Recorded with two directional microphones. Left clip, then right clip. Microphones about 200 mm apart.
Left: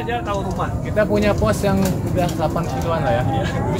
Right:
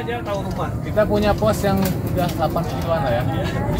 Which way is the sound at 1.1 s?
25° left (ahead or behind).